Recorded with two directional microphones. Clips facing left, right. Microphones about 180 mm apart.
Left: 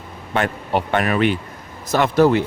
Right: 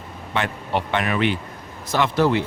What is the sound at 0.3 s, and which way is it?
Speech, 45° left (ahead or behind).